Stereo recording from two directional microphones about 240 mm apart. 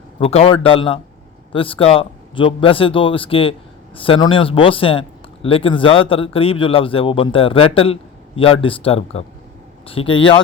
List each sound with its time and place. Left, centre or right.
0.2 s speech: left